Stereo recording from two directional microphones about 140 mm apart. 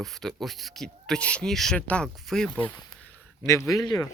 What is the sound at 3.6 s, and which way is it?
Speech, 25° left (ahead or behind).